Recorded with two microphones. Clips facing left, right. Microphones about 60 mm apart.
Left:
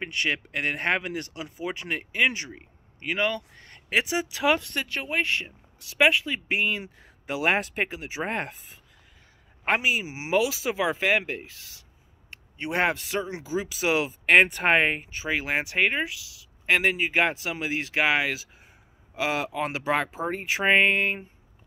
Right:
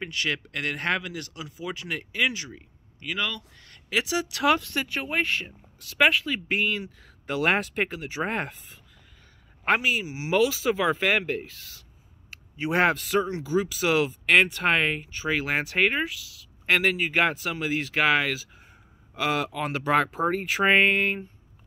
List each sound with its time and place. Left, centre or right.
0.0 s speech: centre
2.2 s speech: left
4.2 s speech: centre
4.6 s speech: centre
9.8 s a man's voice: centre